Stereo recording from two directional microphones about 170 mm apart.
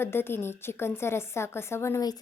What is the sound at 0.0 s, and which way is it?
A woman's voice, 15° left (ahead or behind).